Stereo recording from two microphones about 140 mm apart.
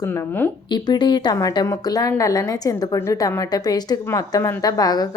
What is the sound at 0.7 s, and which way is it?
A woman's voice, 30° left (ahead or behind).